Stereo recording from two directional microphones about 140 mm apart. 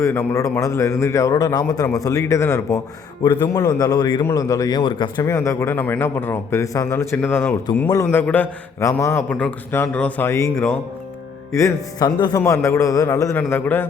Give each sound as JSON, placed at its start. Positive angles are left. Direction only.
{"t": 0.0, "sound": "a man's voice", "side_deg": 20}
{"t": 5.2, "sound": "a man's voice", "side_deg": 20}